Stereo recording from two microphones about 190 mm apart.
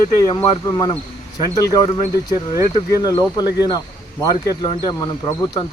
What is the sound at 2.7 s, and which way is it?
Speech, 20° left (ahead or behind).